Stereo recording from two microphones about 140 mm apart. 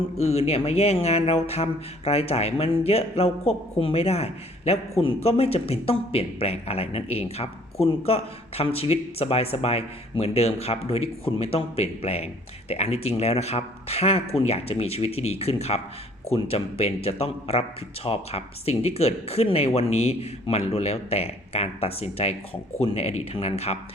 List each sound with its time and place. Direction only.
0.2 s speech: 50° left (ahead or behind)